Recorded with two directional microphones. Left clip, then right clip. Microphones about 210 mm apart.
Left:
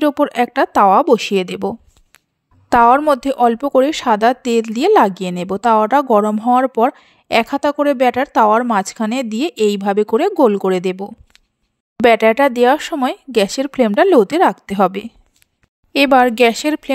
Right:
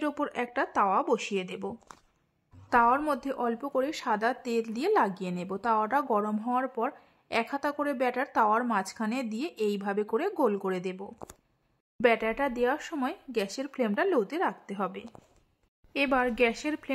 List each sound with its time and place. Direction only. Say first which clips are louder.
0.0 s a woman's voice: left 16 dB; 35° left (ahead or behind)